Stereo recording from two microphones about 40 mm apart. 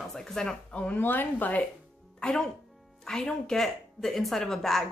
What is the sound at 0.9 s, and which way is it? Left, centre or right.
Speech, left.